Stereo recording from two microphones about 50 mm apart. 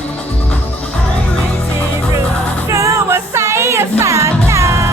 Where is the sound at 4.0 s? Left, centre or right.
Right.